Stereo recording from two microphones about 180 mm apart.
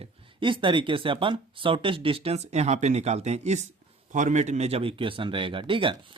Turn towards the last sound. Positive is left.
turn(degrees=-30)  # may be behind; listen again after turning